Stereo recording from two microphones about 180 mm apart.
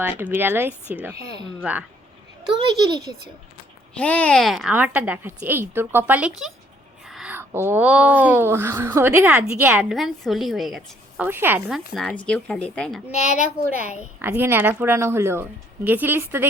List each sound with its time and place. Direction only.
0.0 s speech: 10° right (ahead or behind)
2.6 s a child's voice: 25° right (ahead or behind)
3.9 s speech: 10° left (ahead or behind); by 11.8 s 10° right (ahead or behind)
11.9 s speech: 5° left (ahead or behind)
13.8 s a woman's voice: 40° left (ahead or behind)
14.2 s speech: 10° right (ahead or behind)